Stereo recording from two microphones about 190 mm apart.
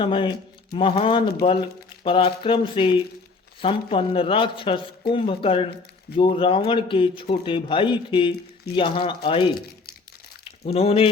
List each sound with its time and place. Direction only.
0.0 s speech: 25° left (ahead or behind)
10.7 s speech: 30° left (ahead or behind)